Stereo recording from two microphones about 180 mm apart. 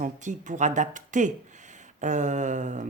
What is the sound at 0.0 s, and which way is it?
Speech, 45° right (ahead or behind).